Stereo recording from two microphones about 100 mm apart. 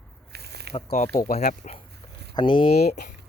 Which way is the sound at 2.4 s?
45° left (ahead or behind).